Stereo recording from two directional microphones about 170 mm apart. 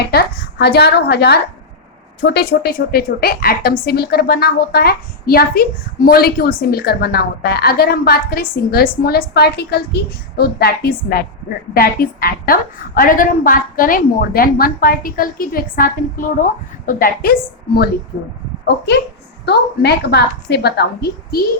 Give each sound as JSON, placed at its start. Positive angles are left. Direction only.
{"t": 0.1, "sound": "a woman's voice", "side_deg": 65}
{"t": 19.5, "sound": "a woman's voice", "side_deg": 75}